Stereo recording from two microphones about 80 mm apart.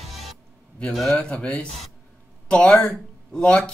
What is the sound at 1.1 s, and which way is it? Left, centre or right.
Speech, centre.